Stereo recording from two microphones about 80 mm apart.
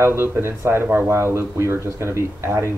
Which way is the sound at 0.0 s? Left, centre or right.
Right.